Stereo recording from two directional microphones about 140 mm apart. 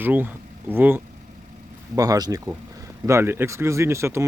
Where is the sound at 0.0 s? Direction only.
15° right (ahead or behind).